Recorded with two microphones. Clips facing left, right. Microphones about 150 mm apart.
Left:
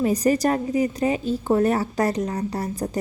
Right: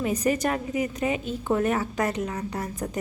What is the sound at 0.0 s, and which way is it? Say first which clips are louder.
A woman's voice: left 5 dB; 35° left (ahead or behind).